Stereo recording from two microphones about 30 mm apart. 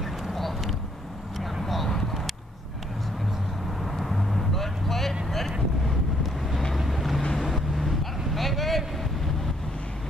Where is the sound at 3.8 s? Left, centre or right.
Centre.